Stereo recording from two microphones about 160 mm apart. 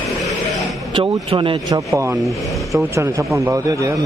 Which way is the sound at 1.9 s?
20° right (ahead or behind).